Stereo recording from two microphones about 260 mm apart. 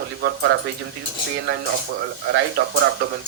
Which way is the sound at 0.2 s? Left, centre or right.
Right.